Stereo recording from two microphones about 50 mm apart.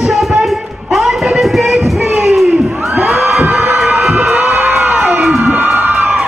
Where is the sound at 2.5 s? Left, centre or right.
Centre.